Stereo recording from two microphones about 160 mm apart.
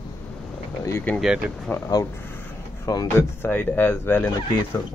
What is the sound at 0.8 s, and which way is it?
Speech, 10° left (ahead or behind).